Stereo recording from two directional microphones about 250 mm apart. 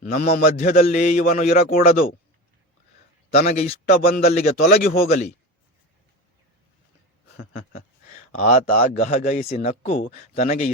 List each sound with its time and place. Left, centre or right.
0.0 s a man's voice: left
3.3 s a man's voice: left
8.3 s a man's voice: left